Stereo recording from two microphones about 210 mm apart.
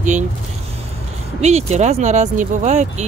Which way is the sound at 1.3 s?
30° right (ahead or behind).